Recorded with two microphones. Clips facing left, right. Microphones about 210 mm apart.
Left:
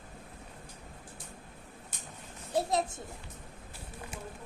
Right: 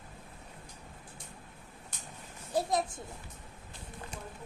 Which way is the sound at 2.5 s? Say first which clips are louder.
Left 1 dB; 25° left (ahead or behind).